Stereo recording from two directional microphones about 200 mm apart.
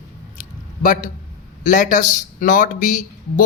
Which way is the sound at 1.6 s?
40° left (ahead or behind).